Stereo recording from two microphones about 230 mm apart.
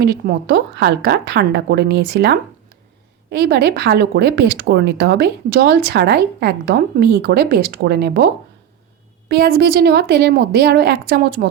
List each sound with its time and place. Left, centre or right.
0.0 s speech: right
9.3 s speech: right